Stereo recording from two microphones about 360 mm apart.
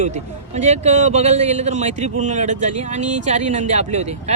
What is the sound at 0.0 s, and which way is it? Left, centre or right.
A man's voice, centre.